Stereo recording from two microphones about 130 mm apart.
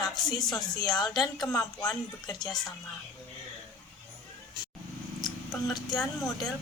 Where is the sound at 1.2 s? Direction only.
5° left (ahead or behind).